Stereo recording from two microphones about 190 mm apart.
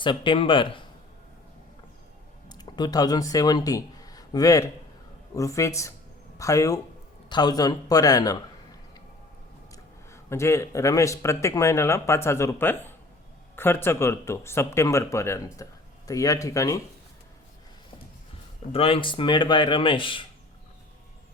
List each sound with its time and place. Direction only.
0.0 s speech: 25° left (ahead or behind)
2.5 s speech: 20° left (ahead or behind)
9.7 s speech: 15° left (ahead or behind)
18.7 s speech: 30° left (ahead or behind)